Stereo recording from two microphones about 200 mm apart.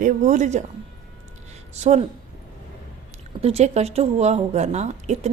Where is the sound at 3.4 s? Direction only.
35° right (ahead or behind).